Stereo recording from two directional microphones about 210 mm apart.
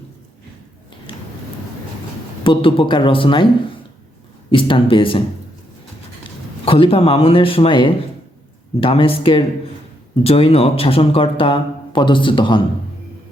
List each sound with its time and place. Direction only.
2.4 s speech: 25° left (ahead or behind)
4.5 s speech: 25° left (ahead or behind)
6.7 s speech: 25° left (ahead or behind)